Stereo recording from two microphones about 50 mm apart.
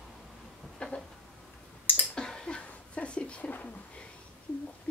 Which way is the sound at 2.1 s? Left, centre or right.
Centre.